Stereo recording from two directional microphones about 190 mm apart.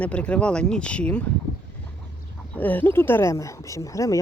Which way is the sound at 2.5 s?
10° left (ahead or behind).